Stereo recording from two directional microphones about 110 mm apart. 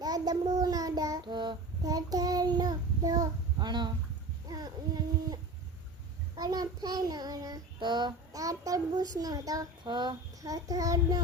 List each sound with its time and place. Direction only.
0.0 s child singing: 35° right (ahead or behind)
4.4 s a sound: 40° right (ahead or behind)
6.3 s child singing: 35° right (ahead or behind)
9.8 s child singing: 45° right (ahead or behind)